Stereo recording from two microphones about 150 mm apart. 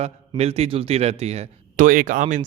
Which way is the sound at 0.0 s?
45° right (ahead or behind).